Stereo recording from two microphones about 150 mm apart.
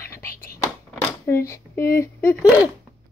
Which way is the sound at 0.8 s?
15° left (ahead or behind).